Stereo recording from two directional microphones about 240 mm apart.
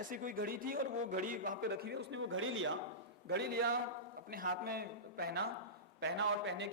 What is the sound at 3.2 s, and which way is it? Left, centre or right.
A man's voice, right.